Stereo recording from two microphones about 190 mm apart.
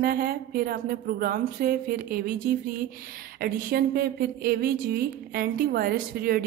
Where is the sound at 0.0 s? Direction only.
50° right (ahead or behind).